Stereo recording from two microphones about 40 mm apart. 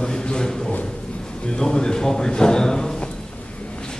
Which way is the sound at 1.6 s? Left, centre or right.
Centre.